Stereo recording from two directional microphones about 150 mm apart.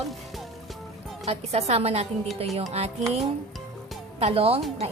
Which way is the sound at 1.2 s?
45° right (ahead or behind).